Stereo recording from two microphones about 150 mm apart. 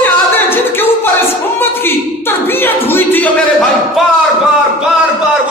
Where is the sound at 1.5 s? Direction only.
15° left (ahead or behind).